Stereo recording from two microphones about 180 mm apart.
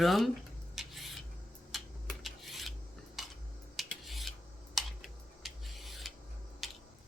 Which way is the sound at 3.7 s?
Centre (ahead or behind).